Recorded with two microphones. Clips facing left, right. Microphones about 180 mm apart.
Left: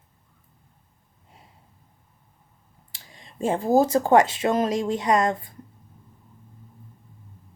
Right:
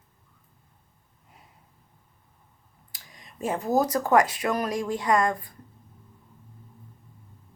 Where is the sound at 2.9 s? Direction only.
30° left (ahead or behind).